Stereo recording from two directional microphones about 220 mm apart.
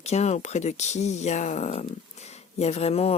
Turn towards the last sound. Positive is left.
turn(degrees=30)  # may be behind; listen again after turning